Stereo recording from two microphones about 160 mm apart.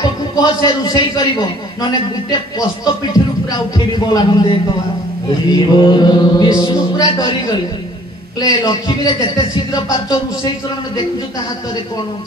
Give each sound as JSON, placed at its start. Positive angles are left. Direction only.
{"t": 0.0, "sound": "a man's voice", "side_deg": 25}
{"t": 2.8, "sound": "a sound", "side_deg": 25}
{"t": 9.9, "sound": "speech", "side_deg": 30}